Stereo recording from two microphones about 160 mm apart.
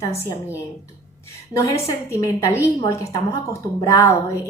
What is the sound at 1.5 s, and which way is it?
Speech, 20° left (ahead or behind).